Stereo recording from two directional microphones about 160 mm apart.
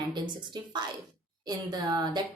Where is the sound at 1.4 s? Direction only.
25° right (ahead or behind).